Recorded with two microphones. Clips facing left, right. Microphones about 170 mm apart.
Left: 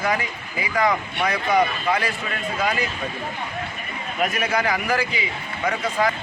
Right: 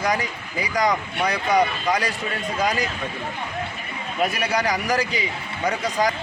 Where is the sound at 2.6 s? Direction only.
40° right (ahead or behind).